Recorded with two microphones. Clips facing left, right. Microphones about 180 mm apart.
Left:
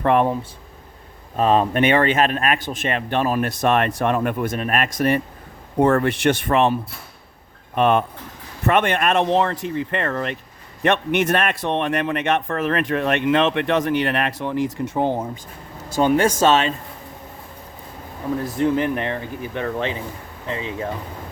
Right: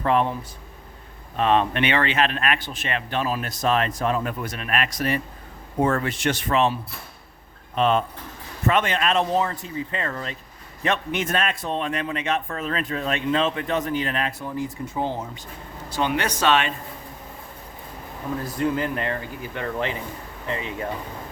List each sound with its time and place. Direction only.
0.0 s speech: 55° left (ahead or behind)
1.4 s a man's voice: 40° left (ahead or behind); by 6.7 s 55° left (ahead or behind)
7.8 s speech: 60° left (ahead or behind)
15.9 s a man's voice: 45° left (ahead or behind)
18.4 s speech: 20° left (ahead or behind)